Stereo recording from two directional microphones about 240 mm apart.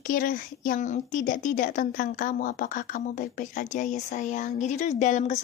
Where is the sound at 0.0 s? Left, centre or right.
Left.